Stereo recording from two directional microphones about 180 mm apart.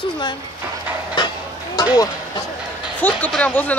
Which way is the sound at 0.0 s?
25° left (ahead or behind).